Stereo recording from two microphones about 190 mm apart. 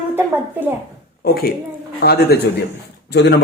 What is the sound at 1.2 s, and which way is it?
A woman's voice, 55° left (ahead or behind).